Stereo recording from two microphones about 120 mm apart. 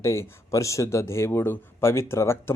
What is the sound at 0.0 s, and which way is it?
A man's voice, 25° left (ahead or behind).